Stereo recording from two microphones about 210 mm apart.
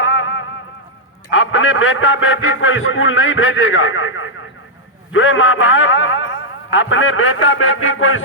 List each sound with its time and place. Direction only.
0.0 s music: 70° left (ahead or behind)
1.3 s a man's voice: 70° left (ahead or behind)